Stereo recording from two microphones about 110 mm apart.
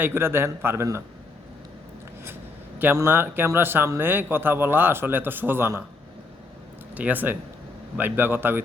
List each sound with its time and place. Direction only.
0.0 s a man's voice: 20° right (ahead or behind)
2.7 s a man's voice: 20° right (ahead or behind)
6.9 s a man's voice: 15° right (ahead or behind)